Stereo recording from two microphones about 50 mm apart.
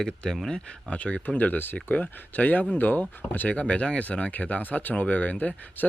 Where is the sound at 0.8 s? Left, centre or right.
Left.